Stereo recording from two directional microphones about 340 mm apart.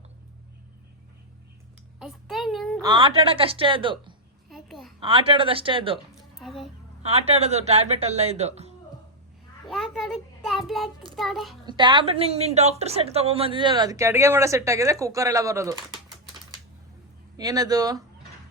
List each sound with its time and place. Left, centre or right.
2.0 s a sound: centre
2.8 s a woman's voice: centre
4.4 s babbling: centre
4.9 s a woman's voice: centre
6.1 s a sound: centre
7.0 s a woman's voice: centre
9.6 s child singing: centre
11.2 s a child's voice: centre
11.6 s a woman's voice: centre
17.3 s a woman's voice: centre